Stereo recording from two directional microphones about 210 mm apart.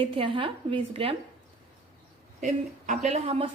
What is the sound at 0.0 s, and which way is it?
A woman's voice, 25° right (ahead or behind).